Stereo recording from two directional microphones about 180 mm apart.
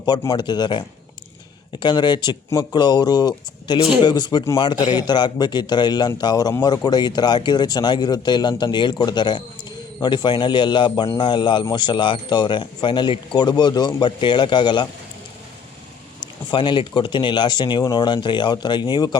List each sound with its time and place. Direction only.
0.0 s speech: 25° left (ahead or behind)
16.5 s speech: 25° left (ahead or behind)